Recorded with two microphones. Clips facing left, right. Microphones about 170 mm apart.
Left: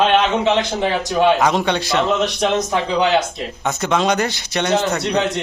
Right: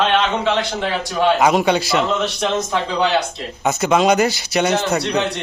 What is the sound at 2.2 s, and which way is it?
Speech, 15° left (ahead or behind).